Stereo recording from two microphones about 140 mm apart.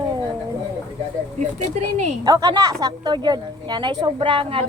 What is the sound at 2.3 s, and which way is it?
A woman's voice, 30° right (ahead or behind).